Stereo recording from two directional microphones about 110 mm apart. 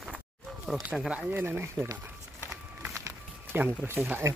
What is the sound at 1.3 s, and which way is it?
Run, 20° right (ahead or behind).